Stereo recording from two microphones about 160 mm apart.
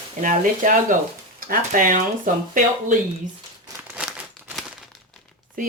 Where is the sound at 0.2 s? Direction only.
60° right (ahead or behind).